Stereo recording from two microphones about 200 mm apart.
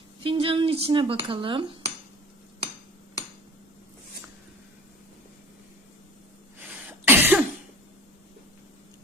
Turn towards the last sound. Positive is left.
turn(degrees=-10)  # may be behind; listen again after turning